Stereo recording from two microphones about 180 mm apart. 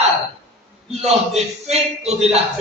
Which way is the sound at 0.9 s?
35° right (ahead or behind).